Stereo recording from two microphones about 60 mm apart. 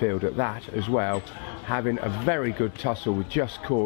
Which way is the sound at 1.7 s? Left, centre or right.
Centre.